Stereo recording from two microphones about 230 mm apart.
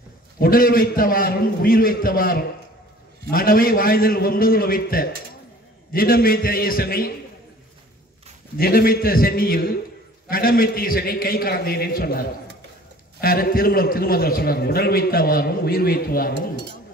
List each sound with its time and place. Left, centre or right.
0.4 s a man's voice: left
8.5 s a man's voice: left